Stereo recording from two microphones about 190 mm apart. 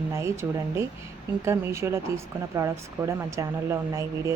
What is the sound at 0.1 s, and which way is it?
Speech, 15° right (ahead or behind).